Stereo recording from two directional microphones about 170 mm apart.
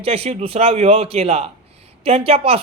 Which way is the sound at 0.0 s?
35° right (ahead or behind).